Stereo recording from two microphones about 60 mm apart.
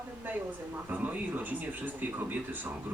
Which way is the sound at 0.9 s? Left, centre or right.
Right.